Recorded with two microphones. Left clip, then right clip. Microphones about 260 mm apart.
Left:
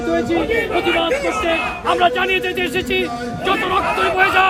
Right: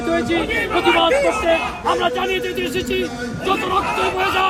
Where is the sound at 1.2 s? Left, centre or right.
Centre.